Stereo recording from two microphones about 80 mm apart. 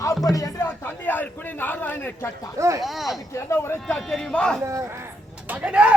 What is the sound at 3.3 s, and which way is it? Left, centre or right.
Speech, left.